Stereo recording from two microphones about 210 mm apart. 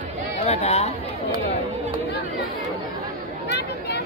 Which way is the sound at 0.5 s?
30° left (ahead or behind).